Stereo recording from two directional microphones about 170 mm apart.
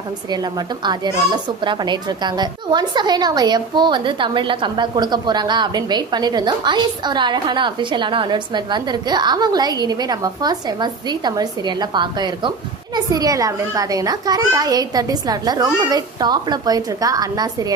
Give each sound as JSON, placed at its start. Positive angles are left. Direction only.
{"t": 0.8, "sound": "a woman's voice", "side_deg": -25}